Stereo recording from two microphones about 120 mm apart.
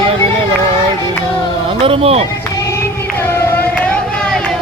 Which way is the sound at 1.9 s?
55° right (ahead or behind).